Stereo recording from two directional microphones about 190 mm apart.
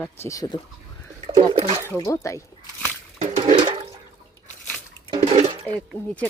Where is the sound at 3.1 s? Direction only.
35° right (ahead or behind).